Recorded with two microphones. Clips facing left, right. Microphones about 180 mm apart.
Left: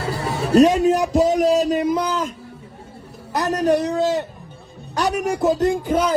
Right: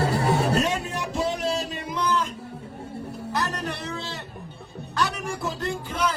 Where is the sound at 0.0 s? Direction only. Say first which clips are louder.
Right 2 dB; 60° right (ahead or behind).